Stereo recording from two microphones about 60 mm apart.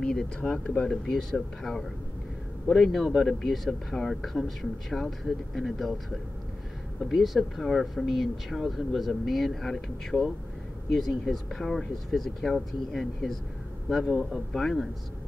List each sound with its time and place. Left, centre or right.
0.0 s speech: centre
0.4 s speech: centre
0.8 s speech: centre